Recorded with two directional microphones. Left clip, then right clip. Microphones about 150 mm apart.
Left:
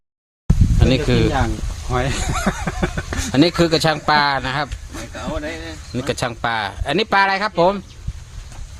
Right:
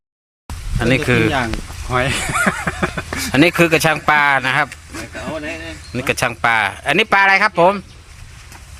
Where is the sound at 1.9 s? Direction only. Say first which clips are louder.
Right 4 dB; 25° right (ahead or behind).